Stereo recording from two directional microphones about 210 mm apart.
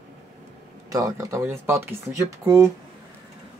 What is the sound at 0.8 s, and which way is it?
Speech, 15° right (ahead or behind).